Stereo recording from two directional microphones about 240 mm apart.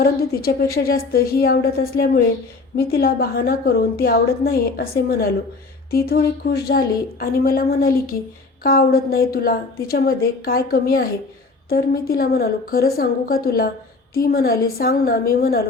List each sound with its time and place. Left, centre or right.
0.3 s a woman's voice: left